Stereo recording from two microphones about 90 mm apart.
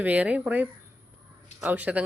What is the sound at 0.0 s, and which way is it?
Speech, 15° right (ahead or behind).